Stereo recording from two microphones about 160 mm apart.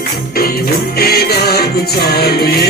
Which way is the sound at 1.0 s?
80° left.